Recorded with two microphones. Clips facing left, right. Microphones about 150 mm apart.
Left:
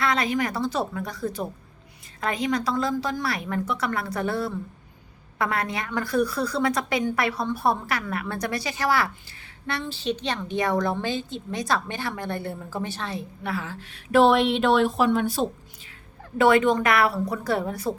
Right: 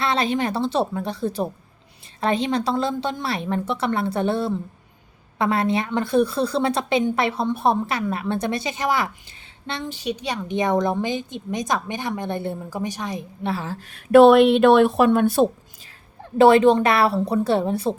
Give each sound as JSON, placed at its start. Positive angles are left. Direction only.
{"t": 0.0, "sound": "a woman's voice", "side_deg": -30}
{"t": 13.5, "sound": "a sound", "side_deg": -30}
{"t": 13.8, "sound": "speech", "side_deg": -55}
{"t": 16.4, "sound": "a woman's voice", "side_deg": -30}